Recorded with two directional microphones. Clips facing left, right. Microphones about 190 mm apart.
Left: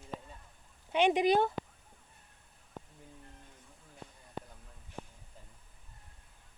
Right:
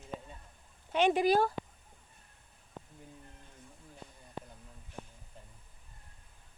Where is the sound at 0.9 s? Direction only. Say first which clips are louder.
Even; 15° left (ahead or behind).